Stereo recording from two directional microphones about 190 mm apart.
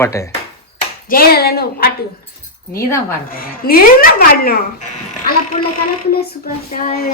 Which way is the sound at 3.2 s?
50° left (ahead or behind).